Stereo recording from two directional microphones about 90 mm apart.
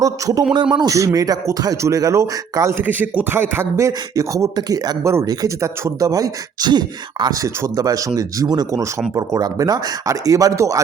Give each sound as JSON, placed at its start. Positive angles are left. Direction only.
{"t": 0.0, "sound": "speech", "side_deg": -40}
{"t": 0.5, "sound": "speech", "side_deg": -55}
{"t": 0.9, "sound": "speech", "side_deg": -40}
{"t": 2.8, "sound": "speech", "side_deg": -20}
{"t": 3.8, "sound": "speech", "side_deg": -35}
{"t": 6.7, "sound": "speech", "side_deg": -55}
{"t": 7.4, "sound": "speech", "side_deg": -35}